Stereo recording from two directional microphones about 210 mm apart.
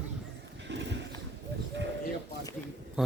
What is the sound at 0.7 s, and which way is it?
Horse, 55° right (ahead or behind).